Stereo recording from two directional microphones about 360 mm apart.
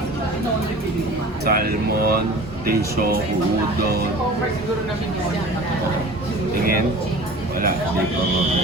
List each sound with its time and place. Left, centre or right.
1.5 s speech: right